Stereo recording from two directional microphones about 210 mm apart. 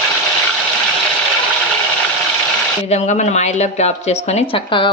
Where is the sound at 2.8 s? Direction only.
30° left (ahead or behind).